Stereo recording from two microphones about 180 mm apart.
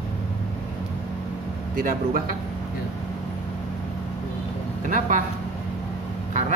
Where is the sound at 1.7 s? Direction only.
50° right (ahead or behind).